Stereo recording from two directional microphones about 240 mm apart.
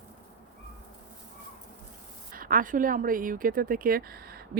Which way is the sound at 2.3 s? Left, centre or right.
Right.